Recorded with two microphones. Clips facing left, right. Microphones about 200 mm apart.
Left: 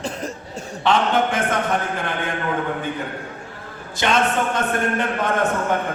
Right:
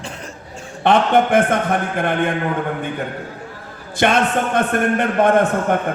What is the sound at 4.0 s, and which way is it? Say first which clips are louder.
A man's voice: right 3 dB; 55° right (ahead or behind).